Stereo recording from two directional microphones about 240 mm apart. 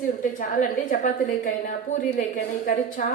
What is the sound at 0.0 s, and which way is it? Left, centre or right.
A woman's voice, left.